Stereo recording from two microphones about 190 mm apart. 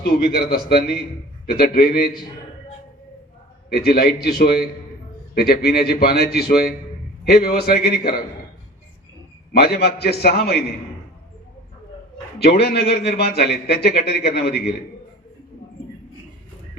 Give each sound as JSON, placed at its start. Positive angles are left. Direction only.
{"t": 0.0, "sound": "a man's voice", "side_deg": 55}
{"t": 3.7, "sound": "a man's voice", "side_deg": 55}
{"t": 9.5, "sound": "a man's voice", "side_deg": 55}
{"t": 12.4, "sound": "a man's voice", "side_deg": 60}